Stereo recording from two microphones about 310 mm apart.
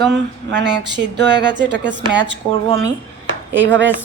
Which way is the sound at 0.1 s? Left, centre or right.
Right.